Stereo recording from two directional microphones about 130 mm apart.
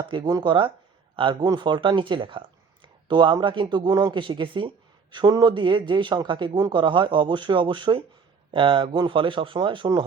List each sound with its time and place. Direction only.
0.1 s speech: 35° right (ahead or behind)